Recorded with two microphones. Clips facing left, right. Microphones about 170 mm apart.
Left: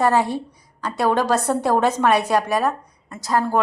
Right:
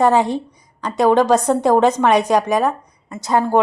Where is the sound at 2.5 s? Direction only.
5° left (ahead or behind).